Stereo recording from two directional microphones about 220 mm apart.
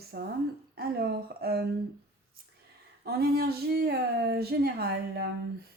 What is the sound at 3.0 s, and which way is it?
Speech, 45° right (ahead or behind).